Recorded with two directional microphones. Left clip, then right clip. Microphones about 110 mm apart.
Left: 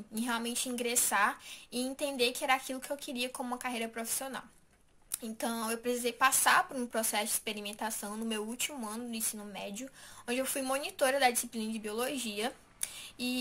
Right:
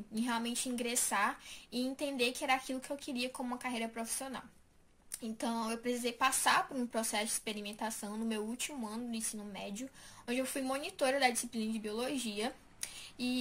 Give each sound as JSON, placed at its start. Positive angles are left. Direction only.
{"t": 0.1, "sound": "a woman's voice", "side_deg": -15}